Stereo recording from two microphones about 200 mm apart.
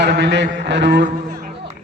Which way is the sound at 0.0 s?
60° right (ahead or behind).